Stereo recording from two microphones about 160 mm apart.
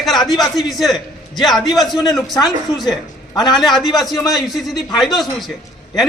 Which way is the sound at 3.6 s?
Centre (ahead or behind).